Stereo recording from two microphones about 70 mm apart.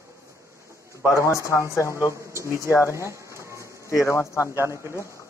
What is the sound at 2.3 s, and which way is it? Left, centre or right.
Speech, right.